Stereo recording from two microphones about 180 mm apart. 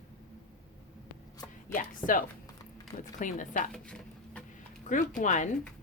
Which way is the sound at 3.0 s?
45° left (ahead or behind).